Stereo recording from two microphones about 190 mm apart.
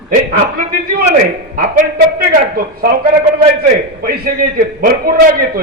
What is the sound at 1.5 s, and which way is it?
A man's voice, 50° right (ahead or behind).